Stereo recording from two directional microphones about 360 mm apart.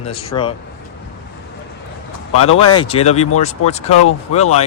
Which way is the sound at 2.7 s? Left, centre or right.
Centre.